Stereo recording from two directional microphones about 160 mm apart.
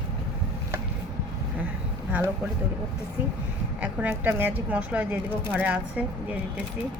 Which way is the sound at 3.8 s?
10° right (ahead or behind).